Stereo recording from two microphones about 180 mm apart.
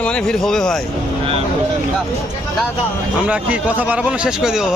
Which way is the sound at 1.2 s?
30° right (ahead or behind).